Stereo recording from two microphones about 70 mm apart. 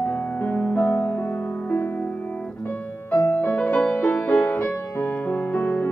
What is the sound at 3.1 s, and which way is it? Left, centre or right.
Music, left.